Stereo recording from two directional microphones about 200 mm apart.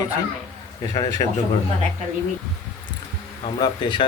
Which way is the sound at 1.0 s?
20° left (ahead or behind).